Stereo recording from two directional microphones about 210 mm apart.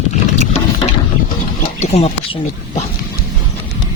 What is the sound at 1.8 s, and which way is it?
Speech, 30° left (ahead or behind).